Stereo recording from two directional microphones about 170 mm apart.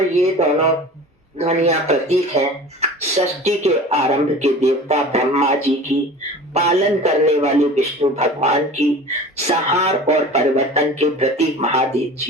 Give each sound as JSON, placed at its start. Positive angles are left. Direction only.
{"t": 0.1, "sound": "a man's voice", "side_deg": -40}